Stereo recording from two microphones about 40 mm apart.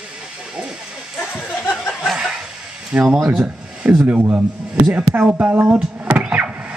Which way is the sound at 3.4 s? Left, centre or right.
Right.